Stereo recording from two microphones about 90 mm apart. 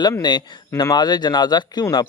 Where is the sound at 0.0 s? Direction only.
50° left (ahead or behind).